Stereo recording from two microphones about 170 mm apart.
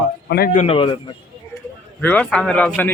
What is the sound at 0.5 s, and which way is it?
Speech, 35° left (ahead or behind).